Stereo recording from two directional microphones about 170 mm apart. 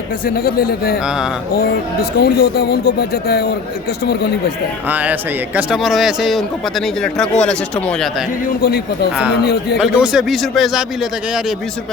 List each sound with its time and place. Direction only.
0.3 s a man's voice: 65° left (ahead or behind)
4.9 s speech: 10° right (ahead or behind)
8.4 s a man's voice: 65° left (ahead or behind)
9.8 s speech: 5° right (ahead or behind)